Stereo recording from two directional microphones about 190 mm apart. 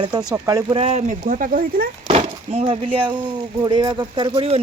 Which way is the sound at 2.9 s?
25° right (ahead or behind).